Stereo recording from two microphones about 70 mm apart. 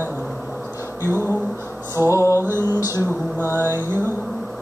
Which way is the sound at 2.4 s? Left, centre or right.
Right.